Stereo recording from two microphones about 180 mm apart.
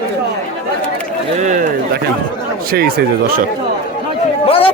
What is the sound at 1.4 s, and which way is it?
Speech, 45° right (ahead or behind).